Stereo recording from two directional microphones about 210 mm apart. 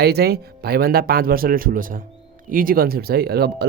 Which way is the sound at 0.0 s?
50° right (ahead or behind).